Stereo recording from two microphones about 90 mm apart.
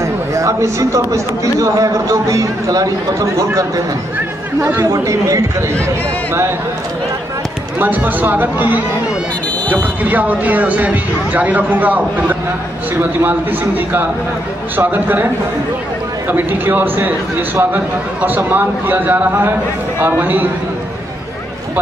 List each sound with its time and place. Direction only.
0.0 s speech: 35° right (ahead or behind)
4.6 s a man's voice: 25° right (ahead or behind)
4.9 s speech: 40° right (ahead or behind)
7.8 s a man's voice: 20° right (ahead or behind)
10.0 s a man's voice: 20° right (ahead or behind)
16.3 s a man's voice: 20° right (ahead or behind)